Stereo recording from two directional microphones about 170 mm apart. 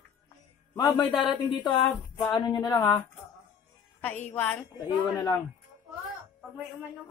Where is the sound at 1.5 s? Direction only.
25° left (ahead or behind).